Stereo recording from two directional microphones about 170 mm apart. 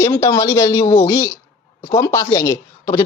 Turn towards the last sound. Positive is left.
turn(degrees=20)  # may be behind; listen again after turning